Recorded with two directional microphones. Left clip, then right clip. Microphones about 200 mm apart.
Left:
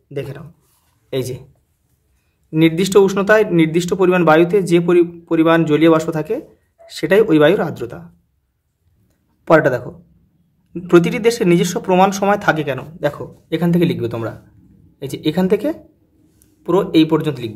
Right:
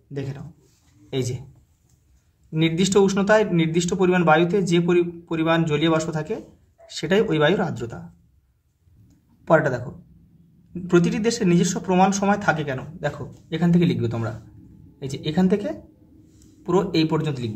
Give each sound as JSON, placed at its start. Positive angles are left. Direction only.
{"t": 0.1, "sound": "a man's voice", "side_deg": 25}
{"t": 2.5, "sound": "a man's voice", "side_deg": 30}
{"t": 9.4, "sound": "a man's voice", "side_deg": 30}